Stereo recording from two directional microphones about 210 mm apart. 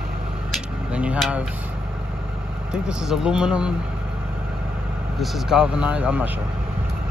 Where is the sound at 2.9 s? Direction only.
5° right (ahead or behind).